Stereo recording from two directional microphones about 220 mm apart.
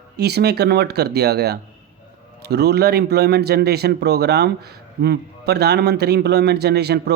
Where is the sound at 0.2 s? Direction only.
45° right (ahead or behind).